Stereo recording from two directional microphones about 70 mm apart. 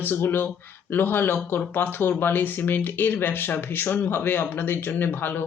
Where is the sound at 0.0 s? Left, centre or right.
Left.